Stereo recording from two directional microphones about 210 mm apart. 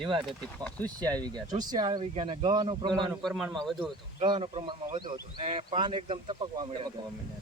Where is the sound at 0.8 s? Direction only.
20° right (ahead or behind).